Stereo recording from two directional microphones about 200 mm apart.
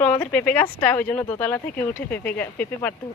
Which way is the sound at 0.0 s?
5° left (ahead or behind).